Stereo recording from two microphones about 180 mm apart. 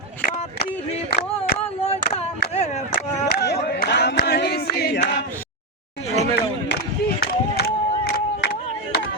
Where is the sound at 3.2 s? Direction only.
65° left (ahead or behind).